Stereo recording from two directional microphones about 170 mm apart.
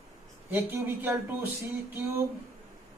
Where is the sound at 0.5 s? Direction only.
10° right (ahead or behind).